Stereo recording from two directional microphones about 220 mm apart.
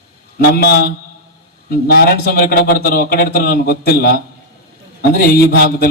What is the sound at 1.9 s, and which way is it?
A man's voice, 45° left (ahead or behind).